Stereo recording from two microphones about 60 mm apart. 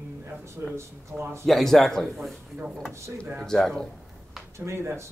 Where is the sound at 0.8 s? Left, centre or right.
Right.